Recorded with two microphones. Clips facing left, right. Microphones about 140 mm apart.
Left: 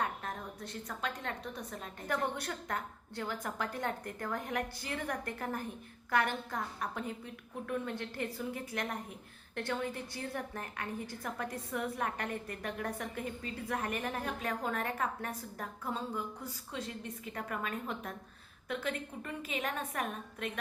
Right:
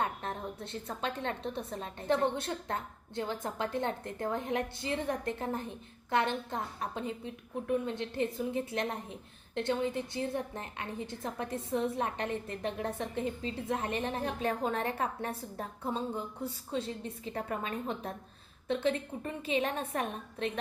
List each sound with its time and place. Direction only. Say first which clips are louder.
0.0 s a woman's voice: right 3 dB; 25° right (ahead or behind)